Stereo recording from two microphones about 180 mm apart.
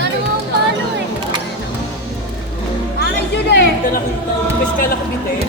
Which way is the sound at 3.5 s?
65° left (ahead or behind).